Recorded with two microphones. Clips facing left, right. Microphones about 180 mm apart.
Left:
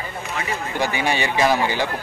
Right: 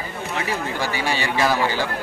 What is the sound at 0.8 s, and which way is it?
A man's voice, 20° left (ahead or behind).